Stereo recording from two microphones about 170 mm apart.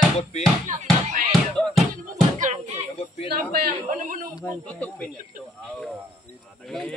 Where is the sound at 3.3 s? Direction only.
55° right (ahead or behind).